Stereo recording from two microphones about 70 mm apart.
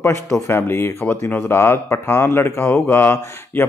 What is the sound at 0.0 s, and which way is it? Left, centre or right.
Speech, left.